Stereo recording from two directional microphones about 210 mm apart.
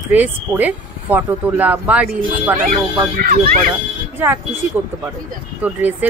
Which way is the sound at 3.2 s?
45° right (ahead or behind).